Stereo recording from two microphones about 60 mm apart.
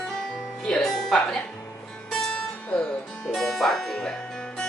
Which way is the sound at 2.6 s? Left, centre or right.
Centre.